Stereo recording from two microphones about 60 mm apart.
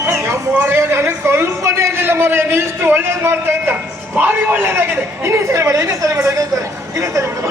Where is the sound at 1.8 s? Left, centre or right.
Right.